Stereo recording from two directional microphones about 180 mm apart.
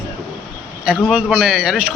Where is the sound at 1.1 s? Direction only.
5° right (ahead or behind).